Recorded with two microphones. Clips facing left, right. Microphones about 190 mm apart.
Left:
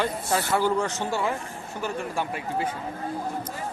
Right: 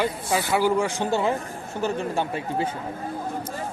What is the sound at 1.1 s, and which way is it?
Speech, 20° right (ahead or behind).